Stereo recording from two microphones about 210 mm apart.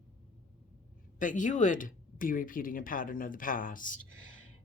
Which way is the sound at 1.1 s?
40° left (ahead or behind).